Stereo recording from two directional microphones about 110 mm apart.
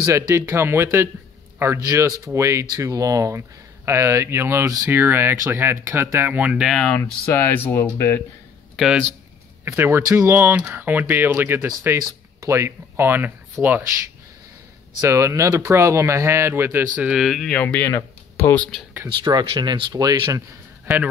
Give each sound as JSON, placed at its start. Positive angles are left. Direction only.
{"t": 0.0, "sound": "speech", "side_deg": -25}
{"t": 7.3, "sound": "speech", "side_deg": 20}
{"t": 8.7, "sound": "speech", "side_deg": -10}
{"t": 9.7, "sound": "speech", "side_deg": -20}
{"t": 15.0, "sound": "speech", "side_deg": -25}
{"t": 17.5, "sound": "speech", "side_deg": 10}
{"t": 19.2, "sound": "speech", "side_deg": -40}
{"t": 20.8, "sound": "speech", "side_deg": -15}